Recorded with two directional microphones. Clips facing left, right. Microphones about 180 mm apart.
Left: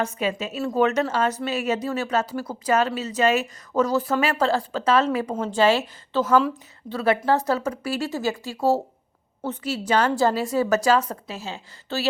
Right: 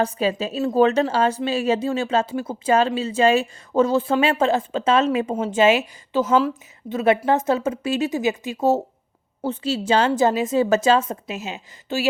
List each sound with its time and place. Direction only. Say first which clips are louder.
0.0 s speech: right 4 dB; 35° right (ahead or behind); by 12.0 s 15° right (ahead or behind)